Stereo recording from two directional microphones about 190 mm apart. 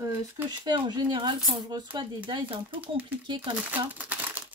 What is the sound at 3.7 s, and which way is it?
Crumpling, 10° right (ahead or behind).